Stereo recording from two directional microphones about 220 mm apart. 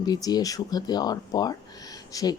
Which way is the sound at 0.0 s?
20° left (ahead or behind).